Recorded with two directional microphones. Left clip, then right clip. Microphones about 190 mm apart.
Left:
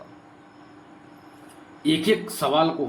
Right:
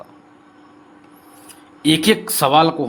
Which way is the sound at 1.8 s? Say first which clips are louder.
Right 6 dB; 60° right (ahead or behind).